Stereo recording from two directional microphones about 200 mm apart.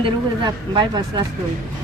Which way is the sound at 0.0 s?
25° right (ahead or behind).